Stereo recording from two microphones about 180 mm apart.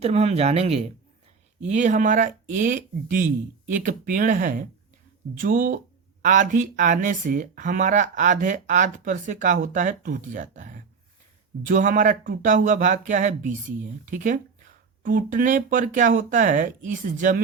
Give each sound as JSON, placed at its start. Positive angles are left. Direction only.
{"t": 0.0, "sound": "speech", "side_deg": -35}